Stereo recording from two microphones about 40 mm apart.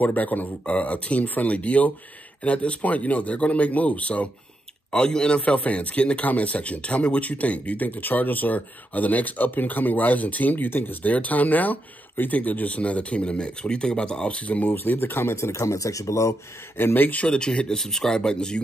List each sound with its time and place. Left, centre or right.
0.0 s speech: left
4.9 s speech: left
5.4 s speech: left
14.6 s speech: left
16.7 s speech: left
17.3 s speech: left
17.7 s speech: centre